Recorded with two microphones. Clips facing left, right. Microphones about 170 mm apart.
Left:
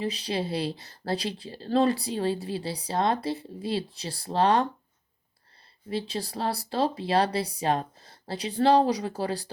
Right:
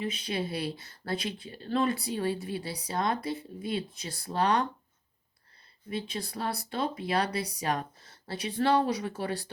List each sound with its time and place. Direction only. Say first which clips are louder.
0.0 s speech: left 3 dB; 30° left (ahead or behind)
5.9 s speech: left 4 dB; 30° left (ahead or behind)